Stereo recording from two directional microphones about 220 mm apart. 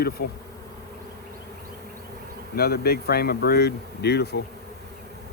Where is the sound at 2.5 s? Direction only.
45° left (ahead or behind).